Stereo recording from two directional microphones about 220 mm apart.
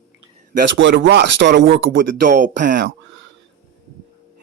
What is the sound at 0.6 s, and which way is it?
Speech, 55° right (ahead or behind).